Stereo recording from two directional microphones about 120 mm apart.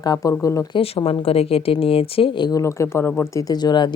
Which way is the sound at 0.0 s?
30° left (ahead or behind).